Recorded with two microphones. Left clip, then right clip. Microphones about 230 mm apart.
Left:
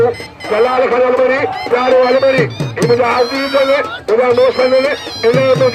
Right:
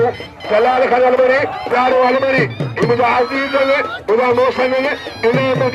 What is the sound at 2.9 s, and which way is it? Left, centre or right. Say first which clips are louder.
Music: left 2 dB; right.